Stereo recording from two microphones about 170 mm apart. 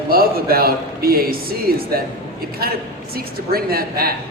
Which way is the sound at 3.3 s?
60° right (ahead or behind).